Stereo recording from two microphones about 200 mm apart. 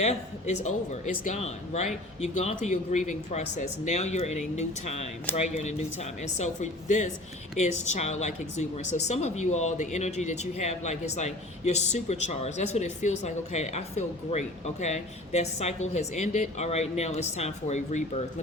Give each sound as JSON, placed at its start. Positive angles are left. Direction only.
{"t": 0.0, "sound": "a woman's voice", "side_deg": 35}